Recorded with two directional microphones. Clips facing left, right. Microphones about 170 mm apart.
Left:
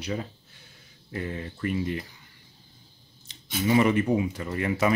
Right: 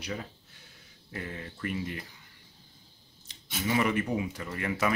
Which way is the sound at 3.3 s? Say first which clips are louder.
Left 6 dB; 25° left (ahead or behind).